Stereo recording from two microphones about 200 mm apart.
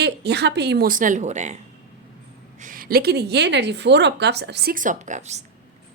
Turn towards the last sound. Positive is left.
turn(degrees=-35)  # may be behind; listen again after turning